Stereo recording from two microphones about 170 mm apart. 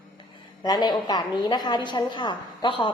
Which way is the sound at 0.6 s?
25° left (ahead or behind).